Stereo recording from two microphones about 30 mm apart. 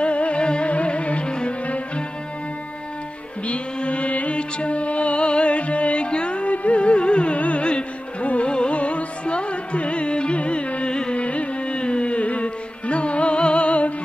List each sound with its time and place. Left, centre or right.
0.0 s music: left
3.4 s music: left
6.0 s carnatic music: left
7.3 s music: left
7.6 s music: left
11.1 s music: left